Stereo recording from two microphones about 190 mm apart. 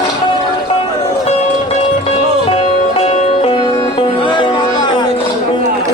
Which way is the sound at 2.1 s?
30° left (ahead or behind).